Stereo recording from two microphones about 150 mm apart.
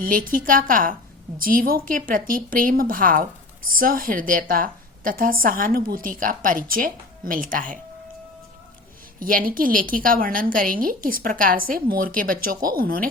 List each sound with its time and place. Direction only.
0.0 s a woman's voice: 70° right (ahead or behind)
9.2 s a woman's voice: 70° right (ahead or behind)